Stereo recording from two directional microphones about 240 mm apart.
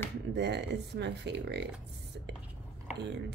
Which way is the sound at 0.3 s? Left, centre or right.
Right.